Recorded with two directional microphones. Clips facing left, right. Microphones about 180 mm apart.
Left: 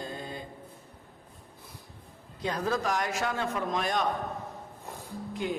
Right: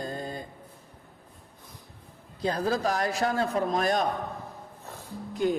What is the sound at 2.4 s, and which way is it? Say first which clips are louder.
A man's voice: right 3 dB; 35° right (ahead or behind).